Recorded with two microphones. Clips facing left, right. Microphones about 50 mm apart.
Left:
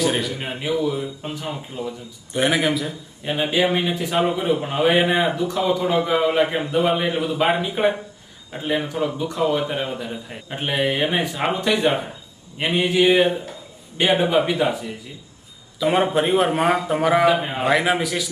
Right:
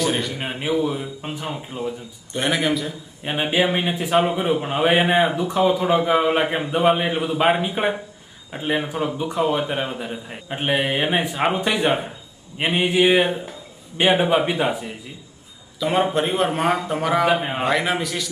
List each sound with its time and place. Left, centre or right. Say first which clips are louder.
0.0 s a man's voice: left 1 dB; centre
0.3 s a man's voice: right 1 dB; centre
2.3 s a man's voice: left 2 dB; centre
3.2 s a man's voice: even; centre
15.8 s a man's voice: left 1 dB; centre
17.2 s a man's voice: left 1 dB; centre
17.7 s a man's voice: left 4 dB; centre